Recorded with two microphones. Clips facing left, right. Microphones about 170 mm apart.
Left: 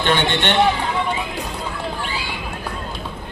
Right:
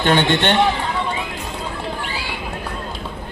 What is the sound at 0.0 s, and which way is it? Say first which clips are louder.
Speech: right 3 dB; 45° right (ahead or behind).